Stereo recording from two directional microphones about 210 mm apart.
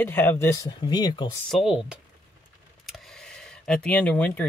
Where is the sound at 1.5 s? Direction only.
5° right (ahead or behind).